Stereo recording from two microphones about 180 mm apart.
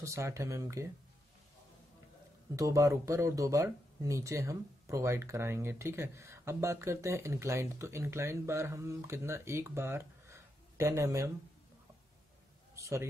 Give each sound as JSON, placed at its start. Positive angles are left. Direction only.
{"t": 0.0, "sound": "speech", "side_deg": -15}
{"t": 2.5, "sound": "speech", "side_deg": -15}
{"t": 12.7, "sound": "a man's voice", "side_deg": -15}